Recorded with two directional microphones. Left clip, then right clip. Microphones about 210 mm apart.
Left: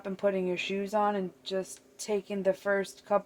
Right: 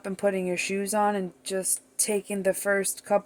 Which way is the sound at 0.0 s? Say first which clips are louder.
Right 3 dB; 55° right (ahead or behind).